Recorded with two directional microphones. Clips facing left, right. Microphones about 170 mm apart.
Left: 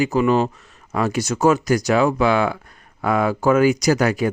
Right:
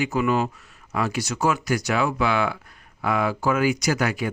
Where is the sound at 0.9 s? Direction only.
45° left (ahead or behind).